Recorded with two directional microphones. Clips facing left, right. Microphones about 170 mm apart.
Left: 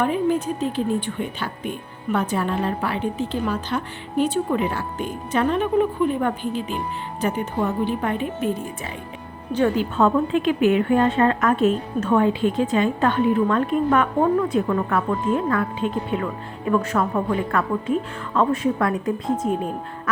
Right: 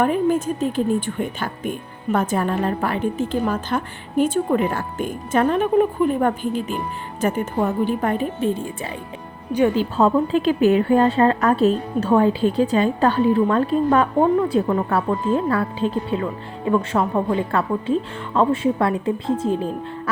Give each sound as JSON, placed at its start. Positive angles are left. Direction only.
{"t": 0.0, "sound": "a woman's voice", "side_deg": -45}
{"t": 8.4, "sound": "a woman's voice", "side_deg": -30}